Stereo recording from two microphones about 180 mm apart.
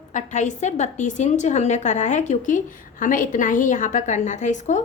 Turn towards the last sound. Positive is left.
turn(degrees=40)  # may be behind; listen again after turning